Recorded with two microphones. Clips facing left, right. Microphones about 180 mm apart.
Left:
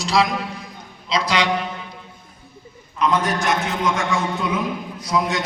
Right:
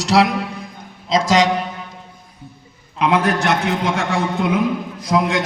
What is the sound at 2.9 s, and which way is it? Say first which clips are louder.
A man's voice: right 3 dB; 65° right (ahead or behind).